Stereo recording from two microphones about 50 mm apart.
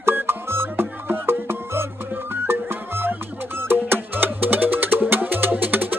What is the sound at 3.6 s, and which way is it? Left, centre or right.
Music, right.